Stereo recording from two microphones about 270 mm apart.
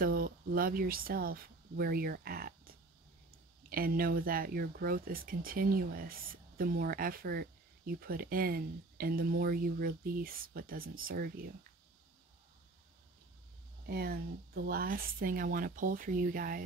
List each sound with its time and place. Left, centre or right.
0.0 s speech: right
3.7 s speech: right
13.8 s speech: right